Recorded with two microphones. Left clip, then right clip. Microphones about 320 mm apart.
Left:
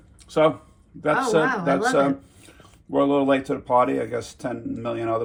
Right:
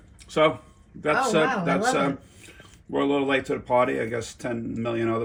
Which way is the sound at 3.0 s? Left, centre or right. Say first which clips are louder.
Left 4 dB; centre.